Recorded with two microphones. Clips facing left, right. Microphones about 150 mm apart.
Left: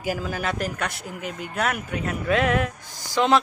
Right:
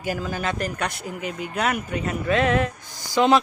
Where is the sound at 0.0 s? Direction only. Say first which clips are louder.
Even; 5° left (ahead or behind).